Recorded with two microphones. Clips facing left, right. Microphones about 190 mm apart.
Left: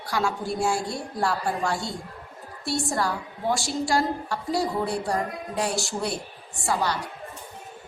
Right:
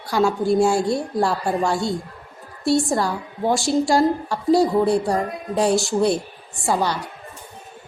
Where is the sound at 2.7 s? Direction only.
25° right (ahead or behind).